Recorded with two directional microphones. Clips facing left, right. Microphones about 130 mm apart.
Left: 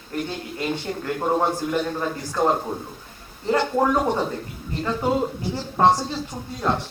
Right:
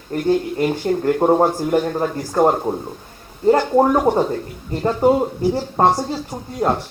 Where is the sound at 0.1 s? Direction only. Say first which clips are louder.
Right 11 dB; 40° right (ahead or behind).